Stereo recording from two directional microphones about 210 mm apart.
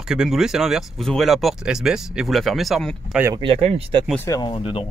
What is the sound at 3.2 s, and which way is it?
Speech, 20° right (ahead or behind).